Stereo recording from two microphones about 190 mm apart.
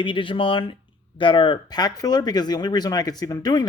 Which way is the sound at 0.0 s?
25° left (ahead or behind).